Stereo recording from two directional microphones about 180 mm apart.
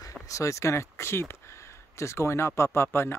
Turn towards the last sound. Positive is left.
turn(degrees=15)  # may be behind; listen again after turning